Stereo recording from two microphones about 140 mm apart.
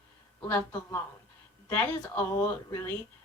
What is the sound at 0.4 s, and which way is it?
A woman's voice, 20° left (ahead or behind).